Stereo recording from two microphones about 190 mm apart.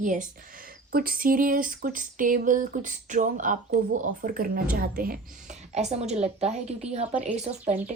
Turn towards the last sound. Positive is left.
turn(degrees=-35)  # may be behind; listen again after turning